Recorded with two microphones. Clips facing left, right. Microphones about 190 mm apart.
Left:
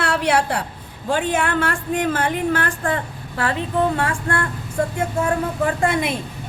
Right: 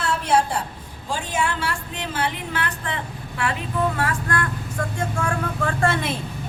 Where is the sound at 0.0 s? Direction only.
70° left (ahead or behind).